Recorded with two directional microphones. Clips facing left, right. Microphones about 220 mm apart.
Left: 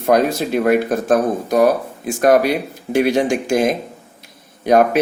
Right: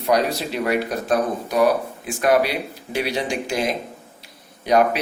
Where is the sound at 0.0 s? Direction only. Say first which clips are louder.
Left 5 dB; 50° left (ahead or behind).